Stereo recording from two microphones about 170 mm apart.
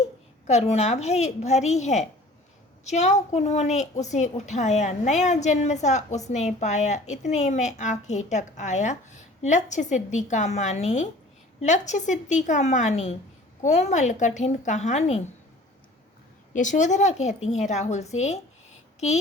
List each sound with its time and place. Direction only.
0.4 s a woman's voice: 40° left (ahead or behind)
16.5 s a woman's voice: 45° left (ahead or behind)